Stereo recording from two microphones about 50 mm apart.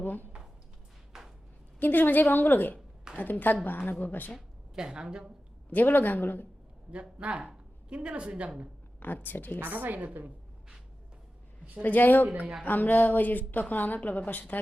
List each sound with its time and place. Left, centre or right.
0.0 s speech: left
1.1 s a sound: centre
1.8 s speech: left
4.4 s a woman's voice: centre
5.7 s speech: left
6.9 s a woman's voice: right
9.0 s speech: left
9.6 s a woman's voice: right
11.8 s speech: left
12.3 s a woman's voice: right
12.6 s speech: left